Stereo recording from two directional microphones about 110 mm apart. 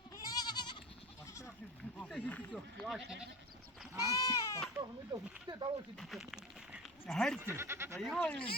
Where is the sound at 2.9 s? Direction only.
5° right (ahead or behind).